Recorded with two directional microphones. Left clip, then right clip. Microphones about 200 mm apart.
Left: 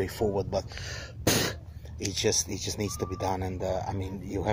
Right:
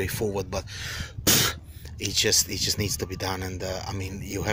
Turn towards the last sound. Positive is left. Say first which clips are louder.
# right 1 dB
turn(degrees=0)  # may be behind; listen again after turning